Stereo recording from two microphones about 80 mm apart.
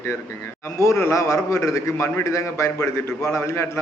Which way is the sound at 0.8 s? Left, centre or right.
Left.